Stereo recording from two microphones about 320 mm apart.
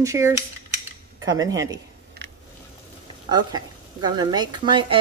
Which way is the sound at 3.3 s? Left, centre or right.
Centre.